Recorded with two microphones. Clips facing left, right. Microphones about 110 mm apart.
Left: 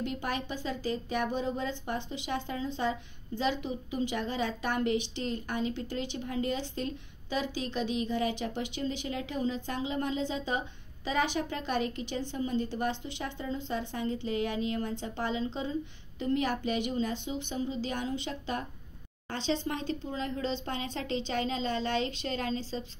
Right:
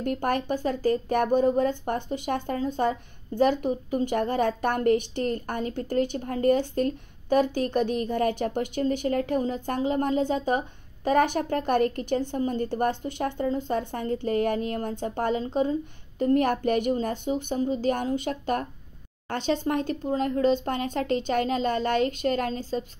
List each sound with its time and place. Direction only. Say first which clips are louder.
0.0 s speech: right 8 dB; 50° right (ahead or behind)